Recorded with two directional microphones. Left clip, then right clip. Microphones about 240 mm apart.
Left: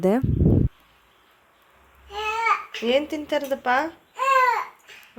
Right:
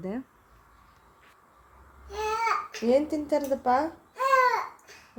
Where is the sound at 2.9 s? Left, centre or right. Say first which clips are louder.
Left 2 dB; centre.